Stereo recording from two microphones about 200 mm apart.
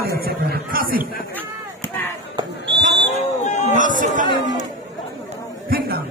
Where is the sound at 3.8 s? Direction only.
40° right (ahead or behind).